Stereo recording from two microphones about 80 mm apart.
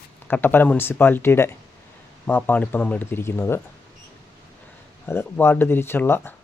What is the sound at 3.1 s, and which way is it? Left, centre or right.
Speech, left.